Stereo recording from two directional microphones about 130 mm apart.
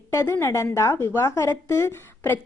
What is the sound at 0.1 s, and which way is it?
A woman's voice, 20° left (ahead or behind).